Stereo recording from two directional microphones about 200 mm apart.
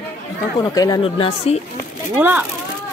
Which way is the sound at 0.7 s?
20° left (ahead or behind).